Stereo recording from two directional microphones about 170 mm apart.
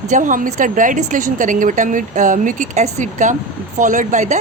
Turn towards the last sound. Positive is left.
turn(degrees=-45)  # may be behind; listen again after turning